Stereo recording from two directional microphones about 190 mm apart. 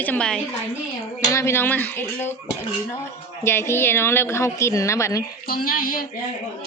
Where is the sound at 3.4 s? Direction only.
15° left (ahead or behind).